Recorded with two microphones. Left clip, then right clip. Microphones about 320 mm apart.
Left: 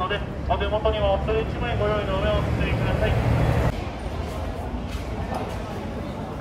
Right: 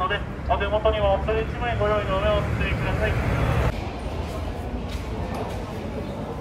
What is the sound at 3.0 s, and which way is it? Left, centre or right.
Speech, left.